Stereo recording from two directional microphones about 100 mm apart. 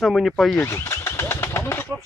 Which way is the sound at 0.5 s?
25° left (ahead or behind).